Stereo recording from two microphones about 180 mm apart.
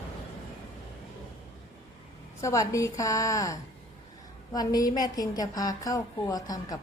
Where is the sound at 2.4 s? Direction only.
15° left (ahead or behind).